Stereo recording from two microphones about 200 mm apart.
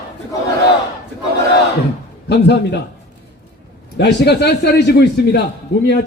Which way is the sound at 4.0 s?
55° left (ahead or behind).